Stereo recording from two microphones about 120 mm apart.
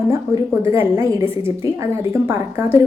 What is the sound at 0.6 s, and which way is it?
A woman's voice, 20° right (ahead or behind).